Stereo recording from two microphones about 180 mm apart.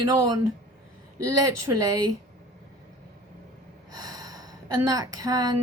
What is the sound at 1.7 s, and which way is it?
Speech, 15° right (ahead or behind).